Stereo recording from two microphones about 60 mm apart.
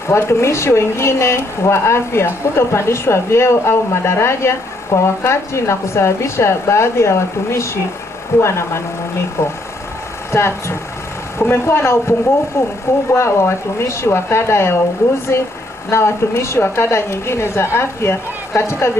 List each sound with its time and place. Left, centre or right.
0.1 s speech: left
15.9 s speech: left